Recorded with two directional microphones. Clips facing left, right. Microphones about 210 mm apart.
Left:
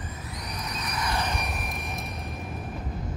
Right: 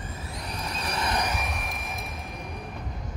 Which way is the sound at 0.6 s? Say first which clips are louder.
Right 2 dB; 30° right (ahead or behind).